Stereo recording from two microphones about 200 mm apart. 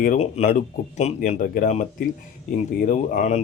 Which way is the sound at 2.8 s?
40° left (ahead or behind).